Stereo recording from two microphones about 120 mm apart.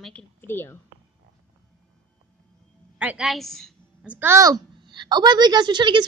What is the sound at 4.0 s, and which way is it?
Speech, 15° right (ahead or behind).